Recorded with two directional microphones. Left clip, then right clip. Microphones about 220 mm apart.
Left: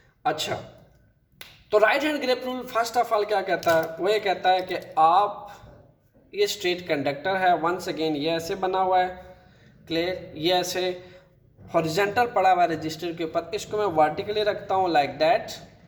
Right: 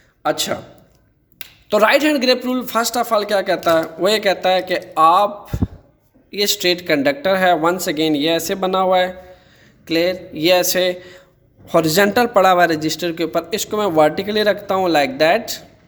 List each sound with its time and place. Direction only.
0.2 s speech: 55° right (ahead or behind)
1.7 s a man's voice: 50° right (ahead or behind)